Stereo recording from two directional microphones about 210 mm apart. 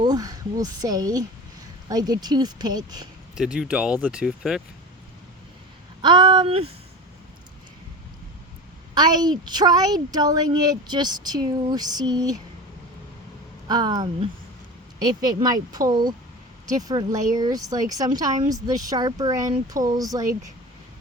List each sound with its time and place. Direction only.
0.0 s a woman's voice: 20° right (ahead or behind)
3.3 s speech: 5° right (ahead or behind)
6.0 s a woman's voice: 20° right (ahead or behind)
9.0 s a woman's voice: 20° right (ahead or behind)
13.7 s a woman's voice: 20° right (ahead or behind)